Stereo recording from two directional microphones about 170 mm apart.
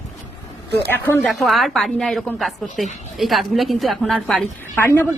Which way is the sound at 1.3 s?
Centre (ahead or behind).